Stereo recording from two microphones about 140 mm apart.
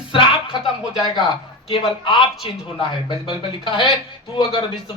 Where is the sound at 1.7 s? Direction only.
35° left (ahead or behind).